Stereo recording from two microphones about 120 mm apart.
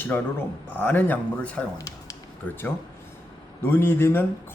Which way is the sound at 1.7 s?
30° left (ahead or behind).